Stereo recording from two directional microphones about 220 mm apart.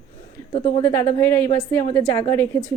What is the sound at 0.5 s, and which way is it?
Speech, 25° left (ahead or behind).